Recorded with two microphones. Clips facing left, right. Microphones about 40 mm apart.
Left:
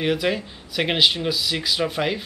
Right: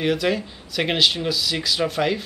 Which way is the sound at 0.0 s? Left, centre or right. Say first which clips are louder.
Right 1 dB; centre.